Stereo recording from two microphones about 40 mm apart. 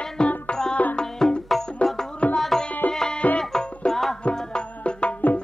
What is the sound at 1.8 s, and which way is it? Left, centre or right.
Music, left.